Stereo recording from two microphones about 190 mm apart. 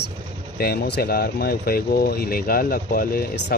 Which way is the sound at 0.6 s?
55° left (ahead or behind).